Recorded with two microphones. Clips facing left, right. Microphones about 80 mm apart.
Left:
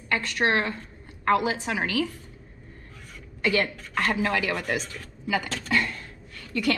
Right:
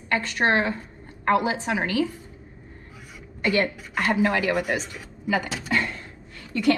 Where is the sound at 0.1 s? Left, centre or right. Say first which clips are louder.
Right 2 dB; centre.